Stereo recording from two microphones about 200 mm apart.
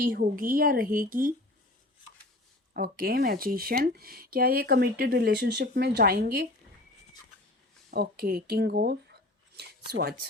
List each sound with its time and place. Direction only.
0.1 s speech: 45° right (ahead or behind)
2.7 s speech: 50° right (ahead or behind)
7.9 s speech: 50° right (ahead or behind)
9.6 s a sound: 50° right (ahead or behind)